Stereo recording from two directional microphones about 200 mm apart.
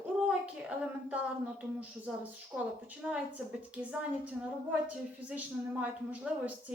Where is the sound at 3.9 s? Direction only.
5° right (ahead or behind).